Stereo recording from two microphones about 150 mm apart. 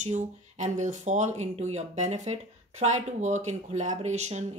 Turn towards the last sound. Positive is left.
turn(degrees=-50)  # may be behind; listen again after turning